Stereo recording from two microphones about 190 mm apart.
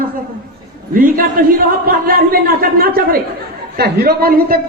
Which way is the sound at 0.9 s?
50° right (ahead or behind).